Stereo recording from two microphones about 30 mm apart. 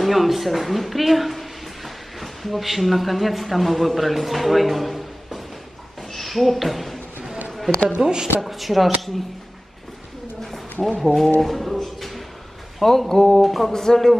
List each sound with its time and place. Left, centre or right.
0.0 s speech: centre
8.0 s a woman's voice: right
8.4 s speech: centre
10.4 s bird: centre
11.0 s a sound: centre
12.8 s speech: centre
13.3 s speech: centre
13.7 s speech: centre